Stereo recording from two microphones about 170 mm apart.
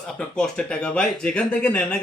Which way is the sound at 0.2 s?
5° left (ahead or behind).